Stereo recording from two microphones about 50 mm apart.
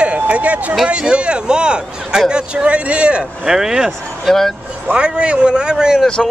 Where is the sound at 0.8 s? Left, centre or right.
Right.